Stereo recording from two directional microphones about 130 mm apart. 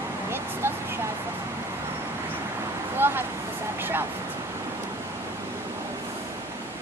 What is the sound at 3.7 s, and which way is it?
Vehicle, 15° right (ahead or behind).